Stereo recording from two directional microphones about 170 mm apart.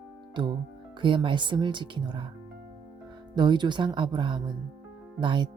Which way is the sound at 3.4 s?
25° right (ahead or behind).